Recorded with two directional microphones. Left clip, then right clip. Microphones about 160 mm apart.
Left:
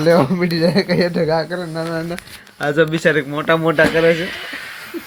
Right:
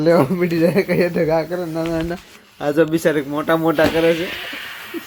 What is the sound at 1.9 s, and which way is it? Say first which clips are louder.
Speech: right 1 dB; 25° right (ahead or behind).